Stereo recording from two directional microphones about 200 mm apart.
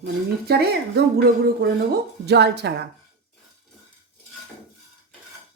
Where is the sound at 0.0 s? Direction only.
55° right (ahead or behind).